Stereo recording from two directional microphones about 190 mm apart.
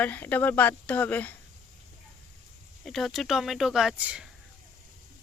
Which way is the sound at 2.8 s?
Centre (ahead or behind).